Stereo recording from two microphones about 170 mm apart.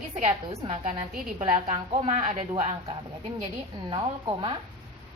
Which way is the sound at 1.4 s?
40° right (ahead or behind).